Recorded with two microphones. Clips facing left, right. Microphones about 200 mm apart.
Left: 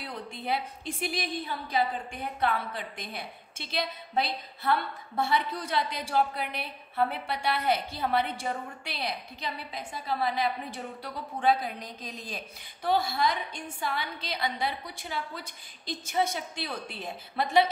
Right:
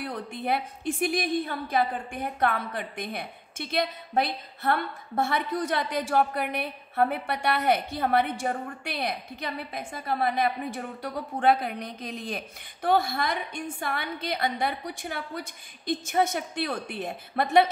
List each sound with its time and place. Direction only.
0.0 s a woman's voice: 55° right (ahead or behind)